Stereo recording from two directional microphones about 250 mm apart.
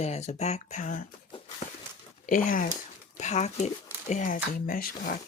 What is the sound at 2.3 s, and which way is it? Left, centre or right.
Speech, left.